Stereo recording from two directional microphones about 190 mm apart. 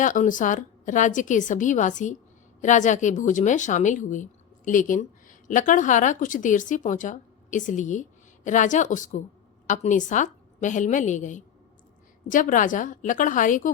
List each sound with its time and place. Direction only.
0.0 s a woman's voice: 45° left (ahead or behind)